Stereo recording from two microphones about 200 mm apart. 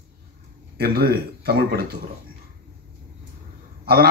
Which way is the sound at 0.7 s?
50° right (ahead or behind).